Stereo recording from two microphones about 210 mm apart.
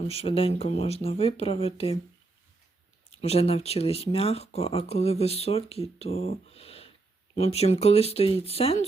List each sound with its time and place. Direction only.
0.1 s speech: 25° left (ahead or behind)
3.2 s speech: 30° left (ahead or behind)